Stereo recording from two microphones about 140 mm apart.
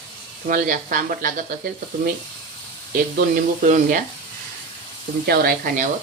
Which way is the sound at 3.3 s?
75° right (ahead or behind).